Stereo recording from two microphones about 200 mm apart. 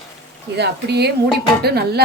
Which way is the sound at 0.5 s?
55° right (ahead or behind).